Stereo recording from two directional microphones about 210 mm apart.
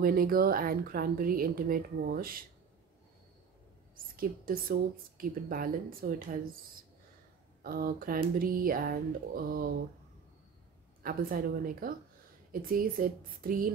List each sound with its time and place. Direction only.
0.0 s speech: 45° right (ahead or behind)
3.9 s speech: 45° right (ahead or behind)
11.0 s speech: 45° right (ahead or behind)